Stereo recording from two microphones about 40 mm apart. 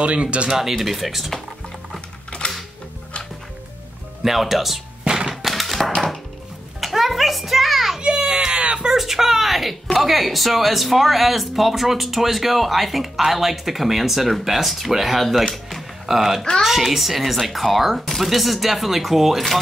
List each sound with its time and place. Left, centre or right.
0.0 s speech: right
0.5 s speech: centre
2.4 s music: left
4.2 s speech: centre
5.0 s thunk: centre
5.3 s a sound: centre
8.0 s baby cry: right
8.5 s a sound: right
8.8 s speech: centre
15.4 s music: centre
16.1 s speech: centre